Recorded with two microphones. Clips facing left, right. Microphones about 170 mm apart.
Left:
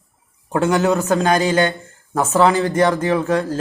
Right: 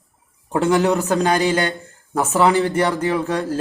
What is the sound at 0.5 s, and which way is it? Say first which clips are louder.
Speech: even; 15° right (ahead or behind).